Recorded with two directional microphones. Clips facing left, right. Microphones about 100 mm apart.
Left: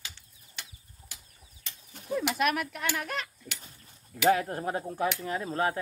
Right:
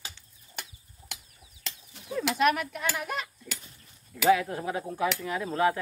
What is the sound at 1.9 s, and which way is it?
Bird, 45° left (ahead or behind).